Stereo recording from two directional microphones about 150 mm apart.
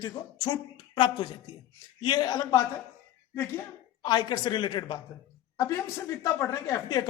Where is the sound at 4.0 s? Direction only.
30° left (ahead or behind).